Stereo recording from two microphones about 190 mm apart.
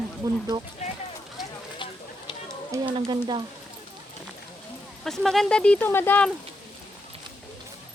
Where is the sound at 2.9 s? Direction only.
25° right (ahead or behind).